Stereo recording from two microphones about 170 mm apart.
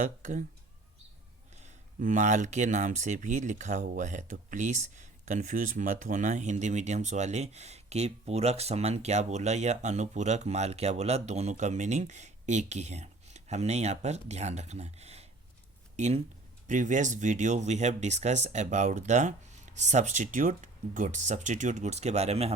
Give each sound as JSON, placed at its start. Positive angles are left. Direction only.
{"t": 0.0, "sound": "speech", "side_deg": -50}
{"t": 1.6, "sound": "speech", "side_deg": -50}